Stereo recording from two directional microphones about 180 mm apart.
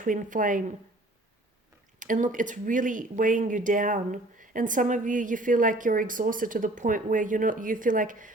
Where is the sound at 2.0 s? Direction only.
45° right (ahead or behind).